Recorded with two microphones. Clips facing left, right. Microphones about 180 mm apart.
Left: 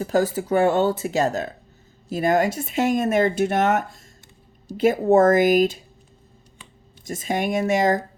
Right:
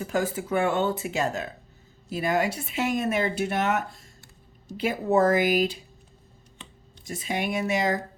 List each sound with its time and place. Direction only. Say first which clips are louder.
0.0 s speech: left 6 dB; 35° left (ahead or behind)
7.0 s speech: left 5 dB; 45° left (ahead or behind)